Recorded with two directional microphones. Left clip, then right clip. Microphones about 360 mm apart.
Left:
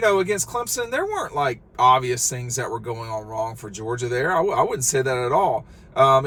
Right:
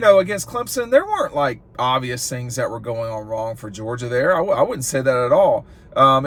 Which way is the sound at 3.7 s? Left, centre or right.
Centre.